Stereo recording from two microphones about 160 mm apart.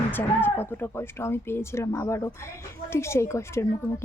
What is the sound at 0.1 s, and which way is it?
Speech, 15° left (ahead or behind).